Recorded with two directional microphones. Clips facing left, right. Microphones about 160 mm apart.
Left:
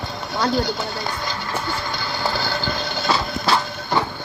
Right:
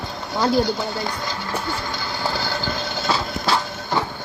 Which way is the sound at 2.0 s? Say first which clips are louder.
Left 1 dB; 65° left (ahead or behind).